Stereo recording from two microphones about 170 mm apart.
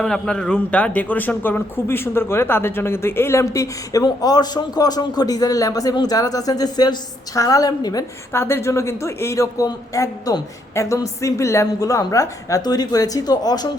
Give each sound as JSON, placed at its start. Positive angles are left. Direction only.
{"t": 0.0, "sound": "speech", "side_deg": 5}